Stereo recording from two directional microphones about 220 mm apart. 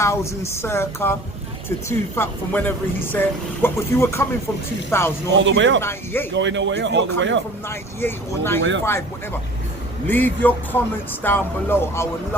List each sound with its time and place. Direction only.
0.0 s speech: 10° left (ahead or behind)
5.4 s speech: 55° right (ahead or behind)
5.8 s speech: 10° left (ahead or behind)
6.3 s speech: 55° right (ahead or behind)
7.7 s speech: 10° left (ahead or behind)
10.1 s speech: 10° left (ahead or behind)